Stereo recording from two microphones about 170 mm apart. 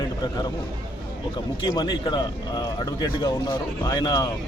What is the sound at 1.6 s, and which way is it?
Speech, 25° left (ahead or behind).